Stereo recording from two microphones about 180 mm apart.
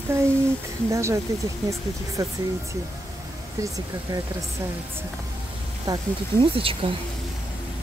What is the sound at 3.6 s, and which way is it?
Speech, 20° right (ahead or behind).